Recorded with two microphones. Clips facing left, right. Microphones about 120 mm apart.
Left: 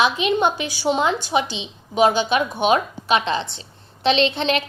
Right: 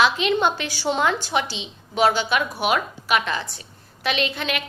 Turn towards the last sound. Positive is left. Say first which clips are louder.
# left 6 dB
turn(degrees=30)  # may be behind; listen again after turning